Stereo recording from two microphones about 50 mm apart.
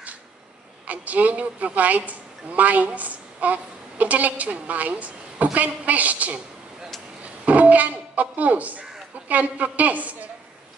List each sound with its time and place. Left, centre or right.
0.8 s speech: right
7.2 s a sound: right
9.3 s a woman's voice: right